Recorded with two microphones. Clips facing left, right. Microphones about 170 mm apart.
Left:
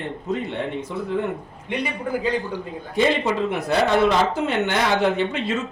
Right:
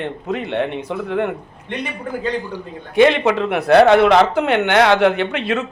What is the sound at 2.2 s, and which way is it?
Speech, 5° left (ahead or behind).